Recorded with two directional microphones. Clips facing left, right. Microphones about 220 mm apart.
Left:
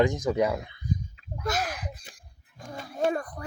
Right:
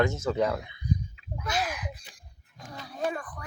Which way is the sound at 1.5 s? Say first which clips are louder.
Right 3 dB; 50° left (ahead or behind).